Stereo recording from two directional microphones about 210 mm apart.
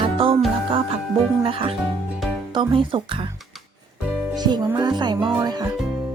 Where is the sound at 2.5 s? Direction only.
25° right (ahead or behind).